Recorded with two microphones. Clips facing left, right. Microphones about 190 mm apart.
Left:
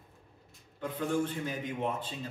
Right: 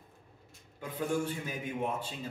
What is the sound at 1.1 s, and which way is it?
A man's voice, 10° right (ahead or behind).